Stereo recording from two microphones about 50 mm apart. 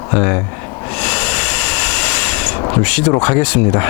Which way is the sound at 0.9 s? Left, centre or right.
Centre.